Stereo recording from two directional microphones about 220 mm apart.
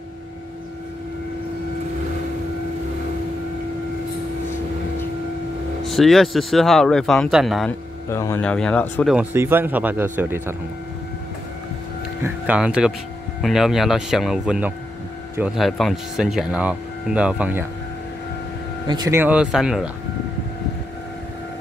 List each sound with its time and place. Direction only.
5.9 s speech: centre (ahead or behind)
8.1 s speech: 10° left (ahead or behind)
9.1 s speech: 10° right (ahead or behind)
12.2 s speech: 5° right (ahead or behind)
18.9 s speech: 15° right (ahead or behind)